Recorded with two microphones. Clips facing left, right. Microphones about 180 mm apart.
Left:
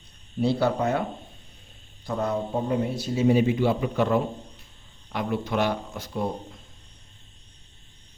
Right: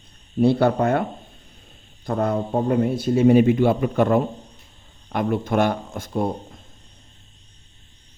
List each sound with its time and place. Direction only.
0.3 s speech: 55° right (ahead or behind)
2.0 s a man's voice: 55° right (ahead or behind)